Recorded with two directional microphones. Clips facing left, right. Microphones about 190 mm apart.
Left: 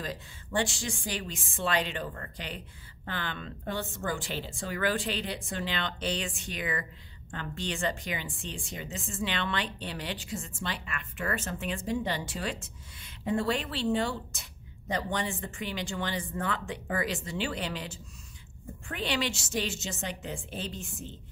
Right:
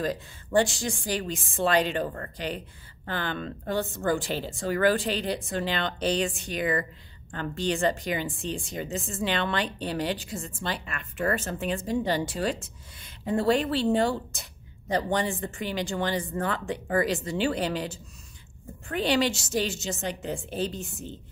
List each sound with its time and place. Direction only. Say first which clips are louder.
0.0 s a woman's voice: right 8 dB; 45° right (ahead or behind)
18.9 s a woman's voice: right 7 dB; 40° right (ahead or behind)